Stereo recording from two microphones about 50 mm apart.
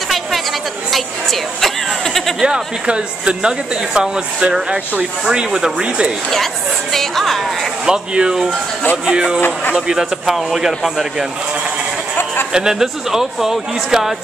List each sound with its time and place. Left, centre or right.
2.4 s speech: centre
6.3 s speech: centre
7.8 s speech: centre
10.3 s speech: centre
12.5 s speech: centre